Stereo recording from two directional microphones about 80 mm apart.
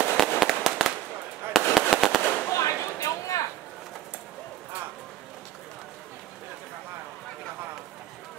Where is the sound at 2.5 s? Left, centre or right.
Left.